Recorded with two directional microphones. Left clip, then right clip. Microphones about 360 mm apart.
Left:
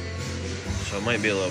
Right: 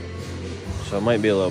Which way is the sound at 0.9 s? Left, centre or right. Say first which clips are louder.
Right 5 dB; centre.